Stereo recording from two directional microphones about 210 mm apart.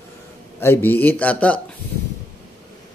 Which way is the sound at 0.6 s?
10° left (ahead or behind).